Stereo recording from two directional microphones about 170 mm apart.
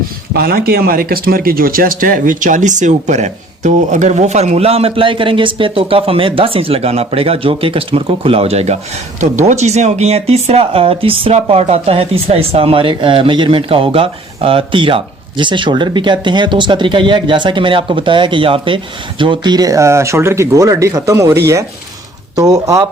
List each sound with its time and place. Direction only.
0.3 s speech: 65° right (ahead or behind); by 21.3 s 20° right (ahead or behind)
22.4 s speech: 20° right (ahead or behind)